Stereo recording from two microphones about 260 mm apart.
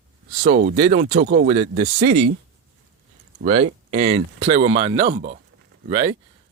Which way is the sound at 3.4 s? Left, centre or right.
Right.